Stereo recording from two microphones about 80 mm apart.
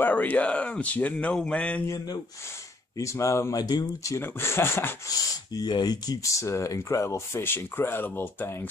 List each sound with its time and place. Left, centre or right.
0.0 s speech: left
3.0 s speech: left
3.5 s speech: left
4.2 s speech: left
5.0 s speech: left
6.3 s speech: left